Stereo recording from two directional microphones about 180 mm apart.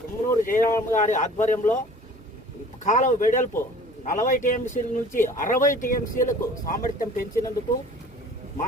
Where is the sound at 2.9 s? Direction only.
45° left (ahead or behind).